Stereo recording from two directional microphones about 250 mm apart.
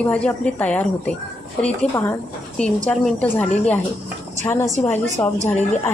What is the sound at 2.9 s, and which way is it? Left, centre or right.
A woman's voice, centre.